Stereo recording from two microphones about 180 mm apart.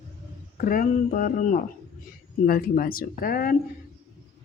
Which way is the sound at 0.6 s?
50° left (ahead or behind).